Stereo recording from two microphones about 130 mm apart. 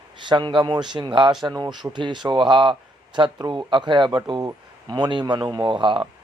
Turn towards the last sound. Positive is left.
turn(degrees=-40)  # may be behind; listen again after turning